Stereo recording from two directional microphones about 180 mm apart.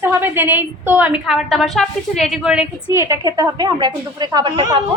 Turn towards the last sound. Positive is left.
turn(degrees=-25)  # may be behind; listen again after turning